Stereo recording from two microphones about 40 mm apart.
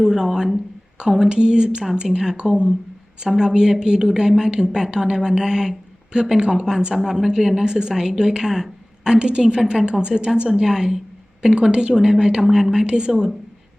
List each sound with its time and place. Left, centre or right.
0.0 s a woman's voice: centre
2.0 s a woman's voice: centre
2.3 s a woman's voice: right; by 9.1 s centre
9.1 s speech: right
10.5 s a woman's voice: centre